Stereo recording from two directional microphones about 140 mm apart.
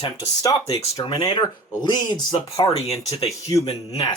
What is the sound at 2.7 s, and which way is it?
Speech, 45° left (ahead or behind).